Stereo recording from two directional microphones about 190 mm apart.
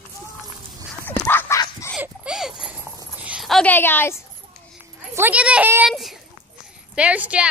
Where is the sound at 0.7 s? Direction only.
5° left (ahead or behind).